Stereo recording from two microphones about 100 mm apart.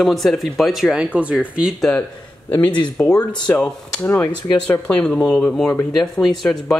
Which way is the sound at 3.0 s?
15° left (ahead or behind).